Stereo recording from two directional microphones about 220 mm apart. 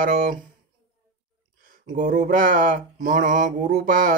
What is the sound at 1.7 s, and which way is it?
Speech, 35° right (ahead or behind).